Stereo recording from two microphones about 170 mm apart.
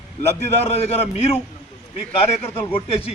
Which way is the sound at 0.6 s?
35° left (ahead or behind).